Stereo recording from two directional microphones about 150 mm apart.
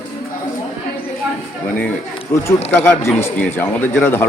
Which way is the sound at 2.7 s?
15° left (ahead or behind).